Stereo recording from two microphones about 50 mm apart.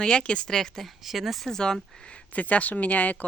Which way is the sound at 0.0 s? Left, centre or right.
Centre.